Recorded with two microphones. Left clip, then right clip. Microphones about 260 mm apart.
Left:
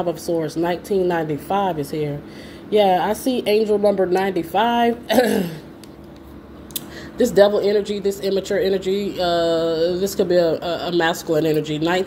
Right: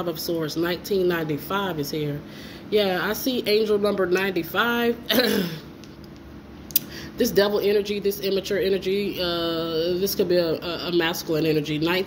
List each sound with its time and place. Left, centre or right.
0.4 s speech: left
6.7 s speech: centre